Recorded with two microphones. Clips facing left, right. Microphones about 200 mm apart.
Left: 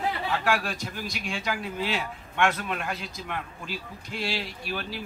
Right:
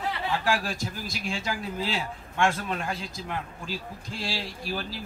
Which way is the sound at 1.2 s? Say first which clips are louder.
Right 1 dB; 30° right (ahead or behind).